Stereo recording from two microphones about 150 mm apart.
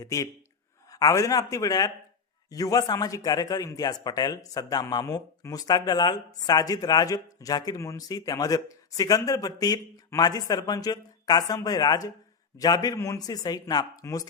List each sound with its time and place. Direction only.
0.0 s speech: 20° left (ahead or behind)